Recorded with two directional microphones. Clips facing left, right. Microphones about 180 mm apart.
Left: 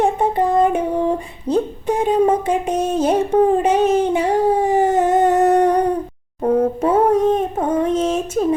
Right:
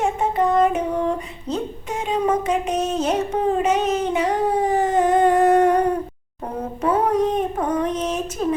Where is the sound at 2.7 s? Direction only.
10° left (ahead or behind).